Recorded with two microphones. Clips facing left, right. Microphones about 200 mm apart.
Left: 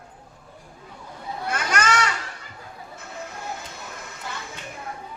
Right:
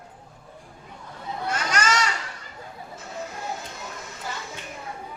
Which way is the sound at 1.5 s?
55° left (ahead or behind).